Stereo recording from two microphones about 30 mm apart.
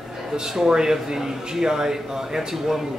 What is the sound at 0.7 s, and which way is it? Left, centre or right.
Speech, right.